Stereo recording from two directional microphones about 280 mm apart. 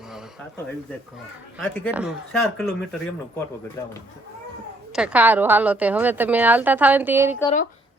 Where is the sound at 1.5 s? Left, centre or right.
Centre.